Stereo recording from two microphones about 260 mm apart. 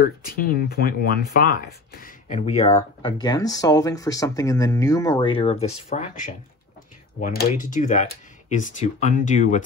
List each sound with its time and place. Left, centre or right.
0.2 s speech: left
7.2 s speech: left